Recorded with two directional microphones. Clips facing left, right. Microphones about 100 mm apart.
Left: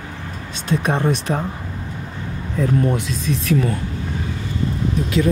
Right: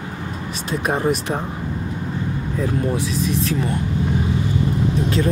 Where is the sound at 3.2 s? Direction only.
30° right (ahead or behind).